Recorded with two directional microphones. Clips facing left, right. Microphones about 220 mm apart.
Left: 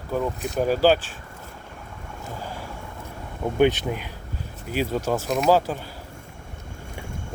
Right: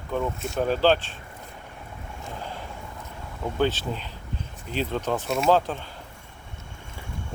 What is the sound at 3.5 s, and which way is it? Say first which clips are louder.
Speech: left 5 dB; 15° left (ahead or behind).